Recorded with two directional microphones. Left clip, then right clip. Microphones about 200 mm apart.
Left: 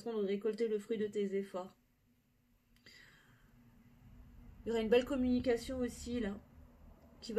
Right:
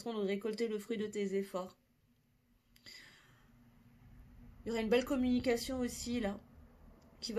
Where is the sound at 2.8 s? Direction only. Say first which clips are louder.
Right 5 dB; 45° right (ahead or behind).